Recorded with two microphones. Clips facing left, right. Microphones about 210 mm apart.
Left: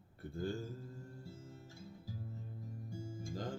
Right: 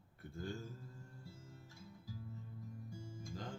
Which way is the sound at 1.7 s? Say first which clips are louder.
Left 1 dB; 30° left (ahead or behind).